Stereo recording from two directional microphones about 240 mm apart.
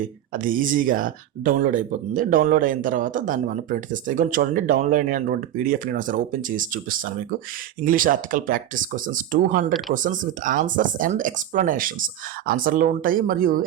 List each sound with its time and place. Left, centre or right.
0.3 s speech: right